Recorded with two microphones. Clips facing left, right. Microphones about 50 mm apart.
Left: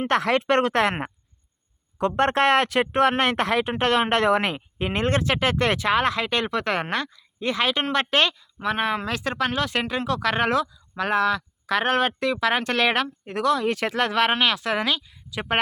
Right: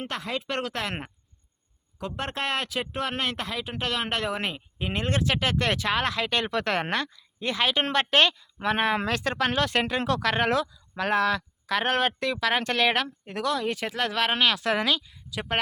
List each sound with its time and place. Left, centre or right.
0.1 s speech: left
2.0 s speech: left
7.4 s speech: left
8.5 s speech: centre
9.1 s speech: centre
11.6 s speech: left
14.1 s speech: left
14.3 s speech: centre
15.4 s speech: left